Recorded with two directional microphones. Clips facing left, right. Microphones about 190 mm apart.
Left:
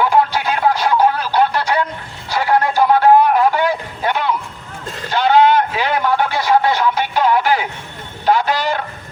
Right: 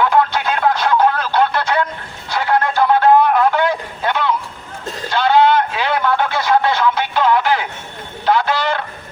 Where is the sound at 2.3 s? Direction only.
10° left (ahead or behind).